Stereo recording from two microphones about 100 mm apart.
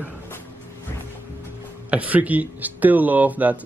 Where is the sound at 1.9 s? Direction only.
15° right (ahead or behind).